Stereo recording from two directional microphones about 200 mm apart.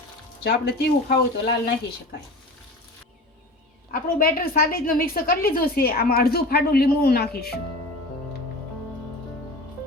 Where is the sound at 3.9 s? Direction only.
50° left (ahead or behind).